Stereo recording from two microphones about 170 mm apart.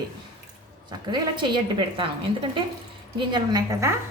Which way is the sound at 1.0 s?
25° right (ahead or behind).